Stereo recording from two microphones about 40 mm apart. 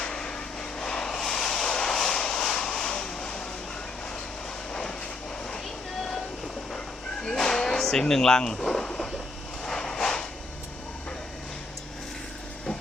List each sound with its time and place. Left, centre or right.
0.0 s vehicle: centre
4.7 s vehicle: left
6.7 s a sound: left
9.6 s vehicle: centre